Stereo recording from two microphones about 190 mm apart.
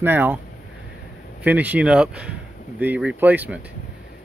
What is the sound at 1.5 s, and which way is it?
Speech, 10° right (ahead or behind).